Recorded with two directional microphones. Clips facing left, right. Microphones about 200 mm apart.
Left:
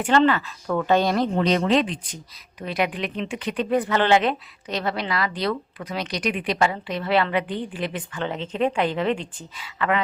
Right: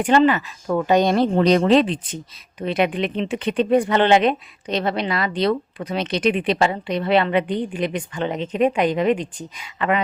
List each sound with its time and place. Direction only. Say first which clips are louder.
0.2 s speech: right 2 dB; 15° right (ahead or behind)
1.1 s speech: right 5 dB; 35° right (ahead or behind)